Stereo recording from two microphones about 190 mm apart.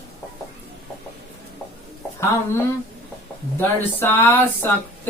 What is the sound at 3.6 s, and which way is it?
Speech, 10° left (ahead or behind).